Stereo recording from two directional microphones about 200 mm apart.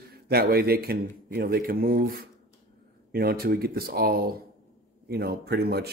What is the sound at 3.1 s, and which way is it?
Speech, 50° right (ahead or behind).